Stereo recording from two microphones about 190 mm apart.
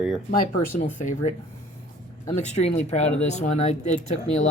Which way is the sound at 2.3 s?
35° left (ahead or behind).